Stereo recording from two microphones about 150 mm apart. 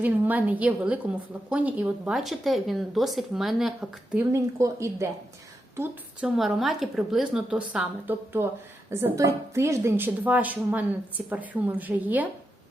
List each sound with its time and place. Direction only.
0.0 s a woman's voice: 10° right (ahead or behind)
4.3 s a woman's voice: 20° right (ahead or behind)